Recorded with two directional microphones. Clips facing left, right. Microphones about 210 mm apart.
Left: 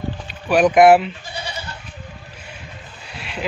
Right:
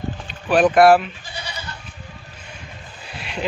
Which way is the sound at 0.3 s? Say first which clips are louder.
Left 1 dB; 10° left (ahead or behind).